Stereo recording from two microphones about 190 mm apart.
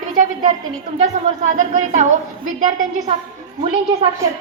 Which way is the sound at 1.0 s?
40° right (ahead or behind).